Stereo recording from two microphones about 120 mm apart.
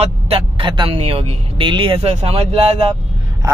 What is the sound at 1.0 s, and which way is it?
Speech, 55° right (ahead or behind).